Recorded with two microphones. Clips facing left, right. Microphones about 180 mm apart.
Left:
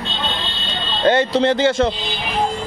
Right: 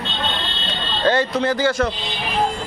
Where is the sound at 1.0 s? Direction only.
25° left (ahead or behind).